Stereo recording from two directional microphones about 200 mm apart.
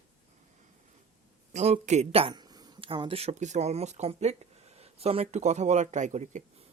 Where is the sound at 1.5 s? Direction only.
35° right (ahead or behind).